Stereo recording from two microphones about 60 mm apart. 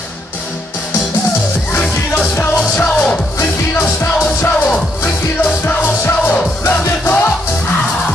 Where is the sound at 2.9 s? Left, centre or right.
Centre.